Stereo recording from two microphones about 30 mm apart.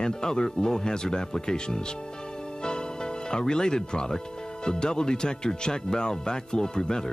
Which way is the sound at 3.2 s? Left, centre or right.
Left.